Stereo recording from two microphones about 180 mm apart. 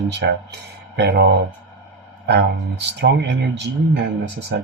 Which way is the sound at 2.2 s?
70° right (ahead or behind).